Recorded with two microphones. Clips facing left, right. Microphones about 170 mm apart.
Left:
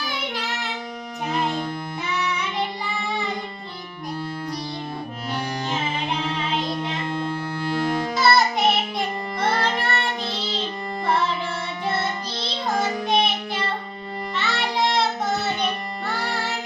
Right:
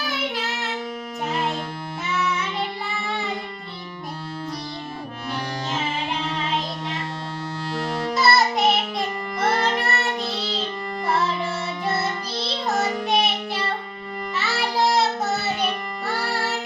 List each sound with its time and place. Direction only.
0.3 s child singing: centre (ahead or behind)
1.3 s music: centre (ahead or behind)
6.1 s music: centre (ahead or behind)
8.1 s music: centre (ahead or behind)
12.0 s music: centre (ahead or behind)